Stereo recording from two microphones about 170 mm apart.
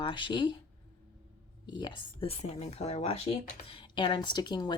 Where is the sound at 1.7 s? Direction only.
25° left (ahead or behind).